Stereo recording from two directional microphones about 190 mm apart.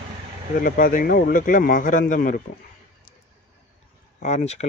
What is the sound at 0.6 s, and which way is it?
Speech, 45° left (ahead or behind).